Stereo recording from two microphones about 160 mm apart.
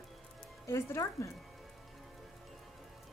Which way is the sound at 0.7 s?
15° left (ahead or behind).